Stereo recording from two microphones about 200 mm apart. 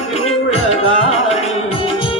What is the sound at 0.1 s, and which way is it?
Music, 30° left (ahead or behind).